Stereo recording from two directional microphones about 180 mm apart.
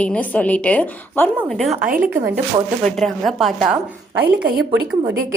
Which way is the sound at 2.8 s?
Centre (ahead or behind).